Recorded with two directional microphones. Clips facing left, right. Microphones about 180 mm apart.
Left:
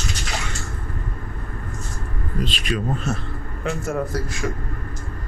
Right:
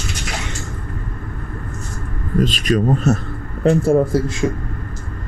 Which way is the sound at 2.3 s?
45° right (ahead or behind).